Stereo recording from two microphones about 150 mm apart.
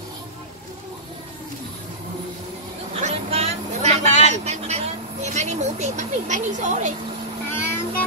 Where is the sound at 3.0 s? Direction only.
45° right (ahead or behind).